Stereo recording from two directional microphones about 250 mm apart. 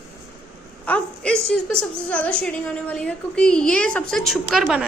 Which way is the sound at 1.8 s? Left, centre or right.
Centre.